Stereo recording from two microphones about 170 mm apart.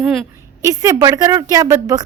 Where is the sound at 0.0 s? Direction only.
Centre (ahead or behind).